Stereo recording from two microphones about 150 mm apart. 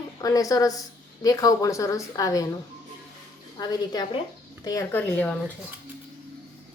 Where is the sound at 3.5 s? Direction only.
25° left (ahead or behind).